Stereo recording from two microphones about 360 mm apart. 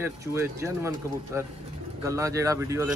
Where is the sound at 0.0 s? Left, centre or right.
Centre.